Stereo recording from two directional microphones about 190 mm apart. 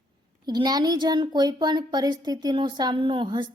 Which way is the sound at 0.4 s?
20° right (ahead or behind).